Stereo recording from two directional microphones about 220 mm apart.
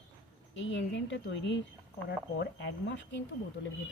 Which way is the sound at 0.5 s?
55° left (ahead or behind).